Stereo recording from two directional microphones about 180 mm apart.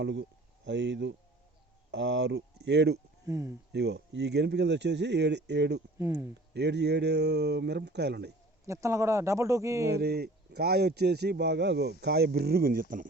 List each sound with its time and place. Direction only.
0.0 s speech: 75° right (ahead or behind)
3.2 s speech: 15° right (ahead or behind)
3.7 s speech: 70° right (ahead or behind)
6.0 s speech: 20° right (ahead or behind)
6.5 s speech: 70° right (ahead or behind)
8.6 s speech: 15° right (ahead or behind)
9.9 s speech: 65° right (ahead or behind)